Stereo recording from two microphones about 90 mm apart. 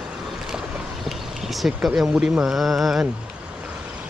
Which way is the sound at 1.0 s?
Centre (ahead or behind).